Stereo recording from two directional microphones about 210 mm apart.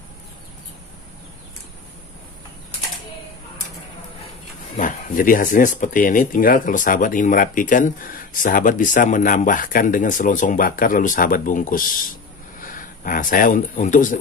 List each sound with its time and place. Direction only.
4.7 s speech: 40° left (ahead or behind)